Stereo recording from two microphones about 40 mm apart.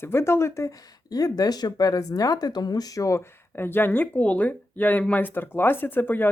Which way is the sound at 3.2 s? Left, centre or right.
Left.